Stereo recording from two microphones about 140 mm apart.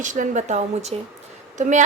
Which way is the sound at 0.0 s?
65° right (ahead or behind).